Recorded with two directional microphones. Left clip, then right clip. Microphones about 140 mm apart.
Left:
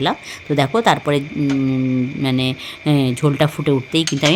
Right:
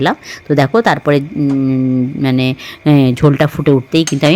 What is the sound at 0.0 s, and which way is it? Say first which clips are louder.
Speech: right 5 dB; 30° right (ahead or behind).